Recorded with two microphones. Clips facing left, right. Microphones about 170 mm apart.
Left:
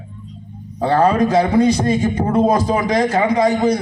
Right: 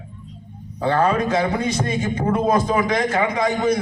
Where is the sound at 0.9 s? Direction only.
35° left (ahead or behind).